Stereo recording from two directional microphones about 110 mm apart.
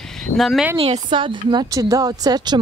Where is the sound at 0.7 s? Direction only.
60° right (ahead or behind); by 2.6 s 40° right (ahead or behind).